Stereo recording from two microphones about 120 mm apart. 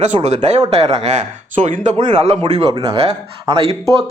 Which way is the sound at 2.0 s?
65° right (ahead or behind).